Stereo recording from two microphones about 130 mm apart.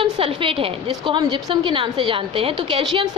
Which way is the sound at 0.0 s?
45° right (ahead or behind).